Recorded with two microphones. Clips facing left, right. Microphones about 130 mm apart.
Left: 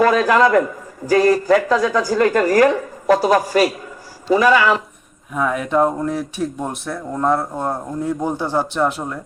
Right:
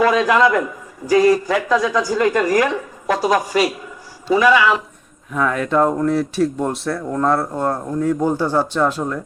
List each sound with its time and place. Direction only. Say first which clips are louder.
0.0 s a man's voice: left 1 dB; 40° left (ahead or behind)
5.3 s speech: right 1 dB; 10° left (ahead or behind)